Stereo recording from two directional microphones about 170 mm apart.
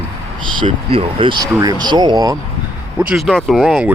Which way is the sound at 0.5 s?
30° right (ahead or behind).